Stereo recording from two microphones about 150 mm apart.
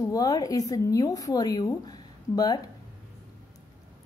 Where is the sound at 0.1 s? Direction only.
25° left (ahead or behind).